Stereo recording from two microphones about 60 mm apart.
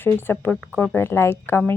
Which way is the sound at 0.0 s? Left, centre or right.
Left.